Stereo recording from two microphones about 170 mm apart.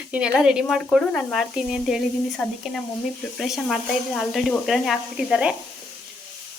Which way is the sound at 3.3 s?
Centre (ahead or behind).